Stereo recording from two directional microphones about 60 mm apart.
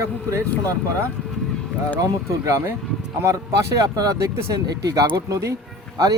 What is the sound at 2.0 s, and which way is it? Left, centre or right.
Speech, right.